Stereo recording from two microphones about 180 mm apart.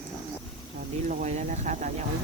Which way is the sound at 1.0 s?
40° right (ahead or behind).